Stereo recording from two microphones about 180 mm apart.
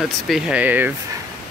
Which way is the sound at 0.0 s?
5° right (ahead or behind).